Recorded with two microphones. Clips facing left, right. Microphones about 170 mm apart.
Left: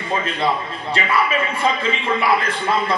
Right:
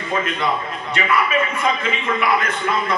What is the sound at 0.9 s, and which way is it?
A man's voice, 30° left (ahead or behind).